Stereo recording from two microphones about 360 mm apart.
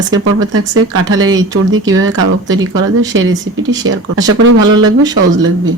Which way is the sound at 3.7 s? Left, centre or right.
Right.